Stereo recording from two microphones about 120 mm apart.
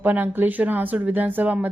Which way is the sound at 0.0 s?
15° right (ahead or behind).